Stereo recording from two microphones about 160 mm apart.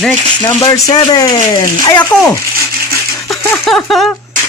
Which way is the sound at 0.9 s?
25° left (ahead or behind).